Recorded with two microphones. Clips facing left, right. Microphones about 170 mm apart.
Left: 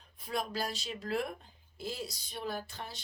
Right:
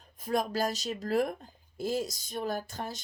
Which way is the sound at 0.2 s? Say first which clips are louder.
Right 6 dB; 45° right (ahead or behind).